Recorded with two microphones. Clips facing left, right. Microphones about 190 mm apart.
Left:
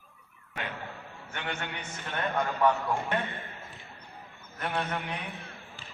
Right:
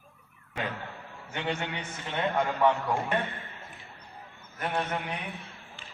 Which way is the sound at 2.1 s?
20° right (ahead or behind).